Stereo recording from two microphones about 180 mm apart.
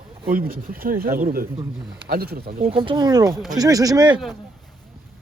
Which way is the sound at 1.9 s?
60° right (ahead or behind).